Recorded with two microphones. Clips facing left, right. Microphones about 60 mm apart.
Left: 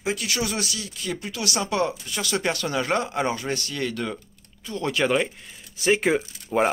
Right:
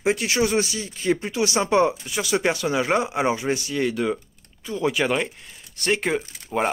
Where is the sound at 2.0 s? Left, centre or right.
Centre.